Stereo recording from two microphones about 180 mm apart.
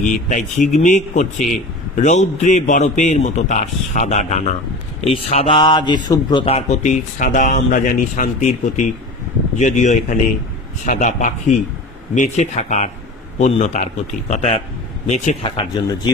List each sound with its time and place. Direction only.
0.0 s speech: 45° left (ahead or behind); by 6.4 s 25° left (ahead or behind)
6.4 s speech: 35° left (ahead or behind)